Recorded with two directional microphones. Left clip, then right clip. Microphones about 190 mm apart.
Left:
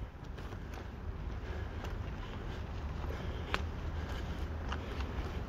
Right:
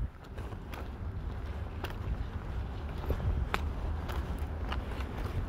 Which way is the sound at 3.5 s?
60° right (ahead or behind).